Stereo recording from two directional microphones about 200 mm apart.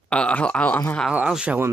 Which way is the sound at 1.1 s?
5° right (ahead or behind).